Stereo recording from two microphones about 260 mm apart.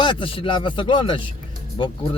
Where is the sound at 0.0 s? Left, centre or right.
Centre.